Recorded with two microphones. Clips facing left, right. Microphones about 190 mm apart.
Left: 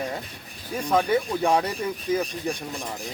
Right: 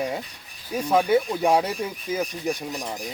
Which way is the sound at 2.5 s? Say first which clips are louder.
Right 2 dB; 30° left (ahead or behind).